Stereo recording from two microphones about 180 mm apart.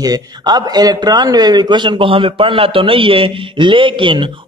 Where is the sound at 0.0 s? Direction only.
20° right (ahead or behind).